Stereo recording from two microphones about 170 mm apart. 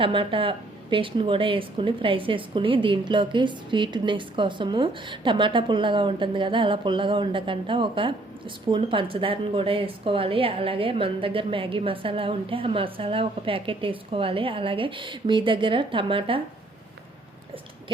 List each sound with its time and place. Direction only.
0.0 s a woman's voice: 30° right (ahead or behind)